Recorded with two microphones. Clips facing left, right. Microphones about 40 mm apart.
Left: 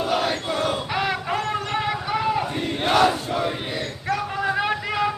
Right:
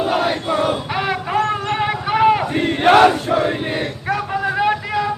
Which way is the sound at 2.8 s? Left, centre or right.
Right.